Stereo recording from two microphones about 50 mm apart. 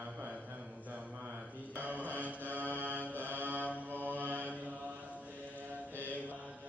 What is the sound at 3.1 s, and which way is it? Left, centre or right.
Music, right.